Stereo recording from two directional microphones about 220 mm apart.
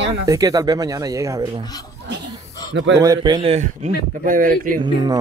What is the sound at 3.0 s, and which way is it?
Speech, 20° right (ahead or behind).